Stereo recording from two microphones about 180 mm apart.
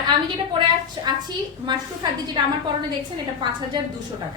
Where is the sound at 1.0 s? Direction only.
25° right (ahead or behind).